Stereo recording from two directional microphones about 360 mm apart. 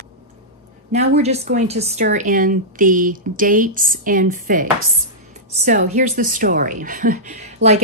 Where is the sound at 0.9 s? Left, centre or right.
Centre.